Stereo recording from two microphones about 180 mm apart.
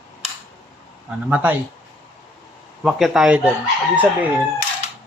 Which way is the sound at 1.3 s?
10° right (ahead or behind).